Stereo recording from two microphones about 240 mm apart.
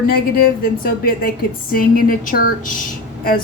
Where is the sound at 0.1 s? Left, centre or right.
Left.